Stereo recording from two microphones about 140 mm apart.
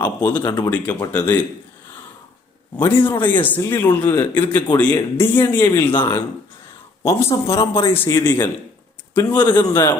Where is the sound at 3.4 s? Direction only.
15° left (ahead or behind).